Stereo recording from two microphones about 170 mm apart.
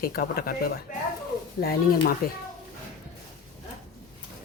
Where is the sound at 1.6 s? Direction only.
60° left (ahead or behind).